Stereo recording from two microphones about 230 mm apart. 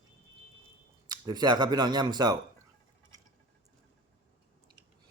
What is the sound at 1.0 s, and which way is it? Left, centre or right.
Speech, centre.